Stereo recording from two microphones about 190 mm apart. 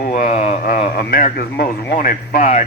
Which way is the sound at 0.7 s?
50° left (ahead or behind).